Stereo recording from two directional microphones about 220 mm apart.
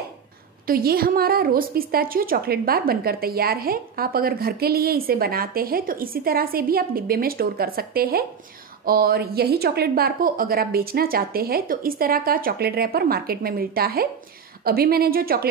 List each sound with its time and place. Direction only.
0.7 s a woman's voice: 45° right (ahead or behind)